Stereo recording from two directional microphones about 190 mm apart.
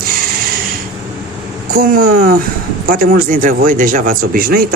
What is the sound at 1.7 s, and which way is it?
Speech, 50° right (ahead or behind).